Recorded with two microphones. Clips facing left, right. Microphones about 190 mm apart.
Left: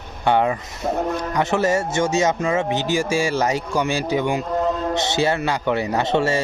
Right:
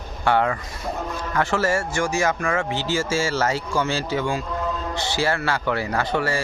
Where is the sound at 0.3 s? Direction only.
20° left (ahead or behind).